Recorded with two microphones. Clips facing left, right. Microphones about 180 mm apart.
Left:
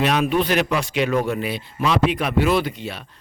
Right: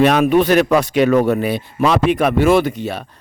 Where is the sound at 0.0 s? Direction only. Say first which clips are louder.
Right 7 dB; 50° right (ahead or behind).